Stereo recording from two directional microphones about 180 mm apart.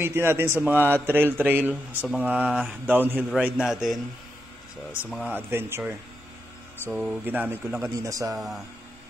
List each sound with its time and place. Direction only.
0.0 s speech: 15° right (ahead or behind)
5.3 s speech: 15° right (ahead or behind)